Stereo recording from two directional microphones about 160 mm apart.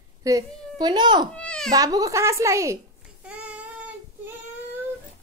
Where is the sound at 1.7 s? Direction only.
25° right (ahead or behind).